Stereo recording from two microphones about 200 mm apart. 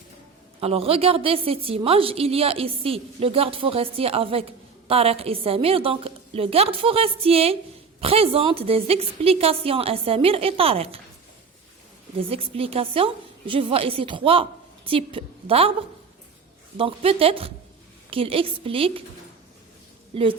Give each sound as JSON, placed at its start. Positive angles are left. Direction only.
{"t": 0.6, "sound": "a woman's voice", "side_deg": -30}
{"t": 12.3, "sound": "a woman's voice", "side_deg": -30}
{"t": 16.7, "sound": "a woman's voice", "side_deg": -30}